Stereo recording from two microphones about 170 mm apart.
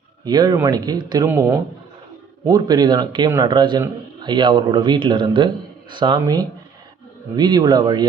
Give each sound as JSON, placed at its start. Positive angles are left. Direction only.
{"t": 0.3, "sound": "a man's voice", "side_deg": -25}